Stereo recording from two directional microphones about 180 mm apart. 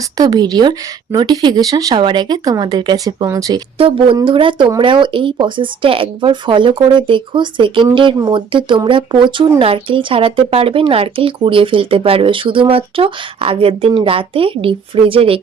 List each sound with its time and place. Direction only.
0.2 s speech: 20° right (ahead or behind)
3.8 s speech: 30° right (ahead or behind)